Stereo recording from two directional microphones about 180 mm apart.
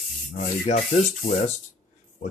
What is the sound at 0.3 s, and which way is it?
Speech, 45° left (ahead or behind).